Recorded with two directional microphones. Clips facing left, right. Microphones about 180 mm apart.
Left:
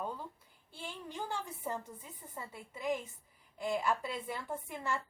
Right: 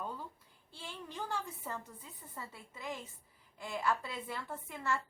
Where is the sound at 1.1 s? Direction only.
20° left (ahead or behind).